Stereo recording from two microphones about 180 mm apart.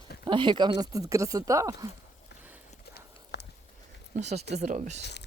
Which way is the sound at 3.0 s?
65° left (ahead or behind).